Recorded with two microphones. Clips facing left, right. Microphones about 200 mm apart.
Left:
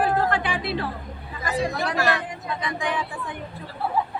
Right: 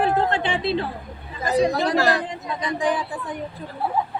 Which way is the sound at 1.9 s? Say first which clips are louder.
Right 4 dB; 35° right (ahead or behind).